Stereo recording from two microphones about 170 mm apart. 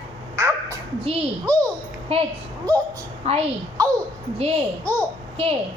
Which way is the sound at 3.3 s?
35° right (ahead or behind).